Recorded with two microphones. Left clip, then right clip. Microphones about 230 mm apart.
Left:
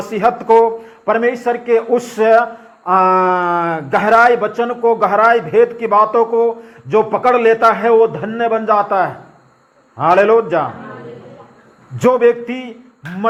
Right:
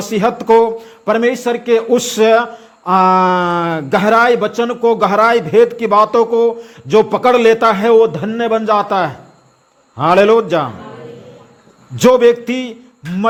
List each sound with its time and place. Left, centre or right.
0.1 s a man's voice: right
2.2 s mantra: right
3.1 s speech: right
11.9 s speech: right